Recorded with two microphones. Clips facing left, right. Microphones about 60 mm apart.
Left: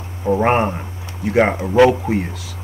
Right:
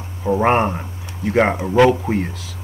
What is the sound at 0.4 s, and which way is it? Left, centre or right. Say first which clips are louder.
Speech: right 1 dB; centre.